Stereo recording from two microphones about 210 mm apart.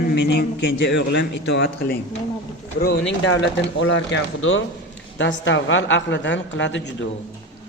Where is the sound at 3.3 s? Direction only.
65° left (ahead or behind).